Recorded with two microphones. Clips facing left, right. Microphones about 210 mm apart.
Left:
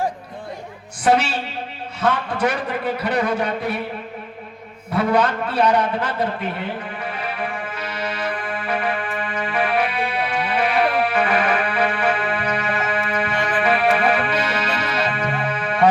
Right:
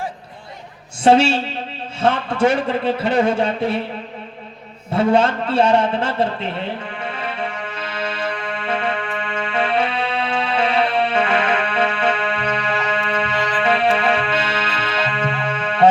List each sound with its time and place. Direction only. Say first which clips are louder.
1.0 s a man's voice: right 5 dB; 25° right (ahead or behind)
4.9 s a man's voice: right 3 dB; 25° right (ahead or behind)
7.0 s music: right 1 dB; 25° right (ahead or behind)